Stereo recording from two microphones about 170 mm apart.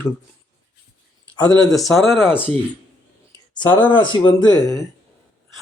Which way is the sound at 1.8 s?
Centre (ahead or behind).